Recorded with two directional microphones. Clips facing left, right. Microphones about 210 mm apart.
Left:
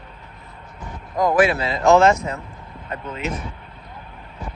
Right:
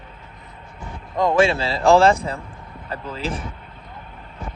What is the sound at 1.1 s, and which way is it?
A man's voice, 25° right (ahead or behind).